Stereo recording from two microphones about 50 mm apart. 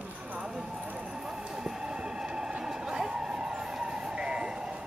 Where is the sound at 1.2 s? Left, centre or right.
Centre.